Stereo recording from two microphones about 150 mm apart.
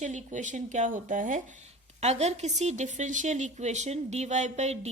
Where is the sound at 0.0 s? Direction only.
50° right (ahead or behind).